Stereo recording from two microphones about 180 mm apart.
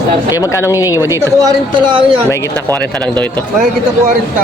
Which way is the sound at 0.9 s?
15° right (ahead or behind).